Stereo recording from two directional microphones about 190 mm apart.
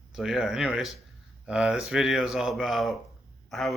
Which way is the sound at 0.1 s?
Centre (ahead or behind).